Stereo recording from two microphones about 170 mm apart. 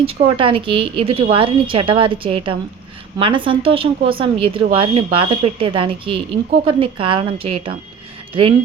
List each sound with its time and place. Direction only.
0.0 s speech: 35° right (ahead or behind)